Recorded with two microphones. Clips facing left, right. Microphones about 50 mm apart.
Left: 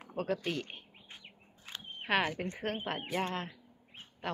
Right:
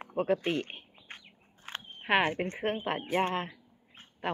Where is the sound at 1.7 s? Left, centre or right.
Right.